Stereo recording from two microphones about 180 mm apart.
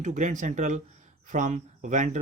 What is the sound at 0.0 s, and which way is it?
Speech, 45° right (ahead or behind).